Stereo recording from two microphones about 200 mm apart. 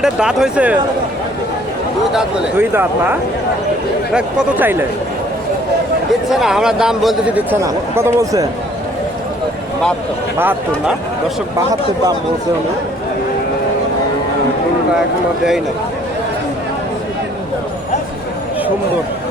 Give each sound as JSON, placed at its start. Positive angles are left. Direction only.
{"t": 0.0, "sound": "speech", "side_deg": -5}
{"t": 2.1, "sound": "speech", "side_deg": -10}
{"t": 6.3, "sound": "speech", "side_deg": 0}
{"t": 10.3, "sound": "speech", "side_deg": -10}